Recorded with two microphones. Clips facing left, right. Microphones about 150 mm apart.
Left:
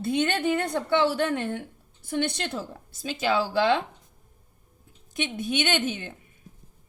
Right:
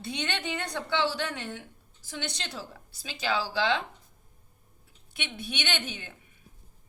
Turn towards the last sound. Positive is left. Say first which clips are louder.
# left 8 dB
turn(degrees=45)  # may be behind; listen again after turning